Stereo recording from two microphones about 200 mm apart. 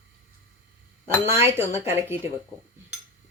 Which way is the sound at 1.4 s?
30° left (ahead or behind).